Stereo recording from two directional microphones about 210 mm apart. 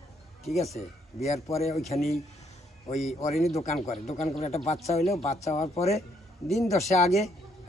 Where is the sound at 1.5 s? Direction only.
30° left (ahead or behind).